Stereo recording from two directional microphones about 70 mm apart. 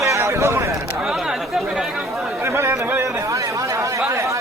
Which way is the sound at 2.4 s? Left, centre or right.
Right.